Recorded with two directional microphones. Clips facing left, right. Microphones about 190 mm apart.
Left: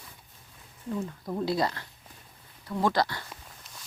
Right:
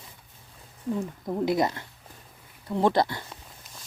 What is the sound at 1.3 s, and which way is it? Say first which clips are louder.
Speech: right 4 dB; 20° right (ahead or behind).